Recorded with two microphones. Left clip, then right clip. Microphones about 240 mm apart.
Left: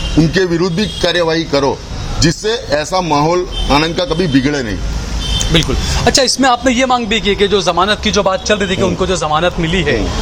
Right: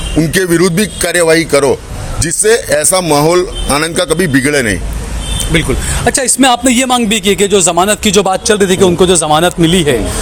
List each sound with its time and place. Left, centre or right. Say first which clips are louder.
0.2 s a man's voice: right 3 dB; right
5.5 s speech: right 1 dB; centre
6.1 s speech: left 1 dB; right
6.4 s a man's voice: right 2 dB; right